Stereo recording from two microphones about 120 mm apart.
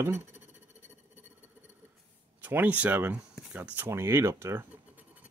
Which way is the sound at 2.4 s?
15° right (ahead or behind).